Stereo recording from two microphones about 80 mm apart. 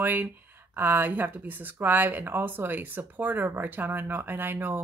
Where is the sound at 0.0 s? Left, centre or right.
Right.